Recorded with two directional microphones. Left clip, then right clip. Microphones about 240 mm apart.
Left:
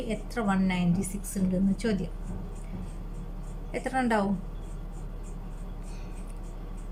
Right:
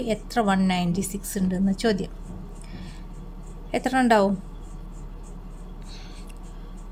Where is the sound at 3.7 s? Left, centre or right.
Right.